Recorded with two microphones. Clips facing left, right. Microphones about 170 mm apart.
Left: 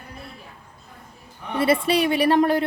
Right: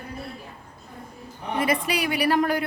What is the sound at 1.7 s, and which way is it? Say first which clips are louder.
Speech: left 8 dB; 30° left (ahead or behind).